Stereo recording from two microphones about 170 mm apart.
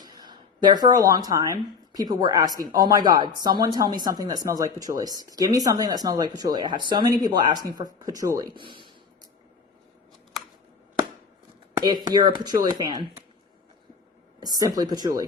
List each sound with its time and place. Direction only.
0.0 s a sound: 25° right (ahead or behind)
2.0 s speech: 25° right (ahead or behind)
11.8 s speech: 25° right (ahead or behind)
14.4 s speech: 25° right (ahead or behind)